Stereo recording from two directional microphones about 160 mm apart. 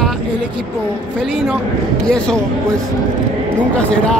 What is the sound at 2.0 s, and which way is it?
Speech, 5° left (ahead or behind).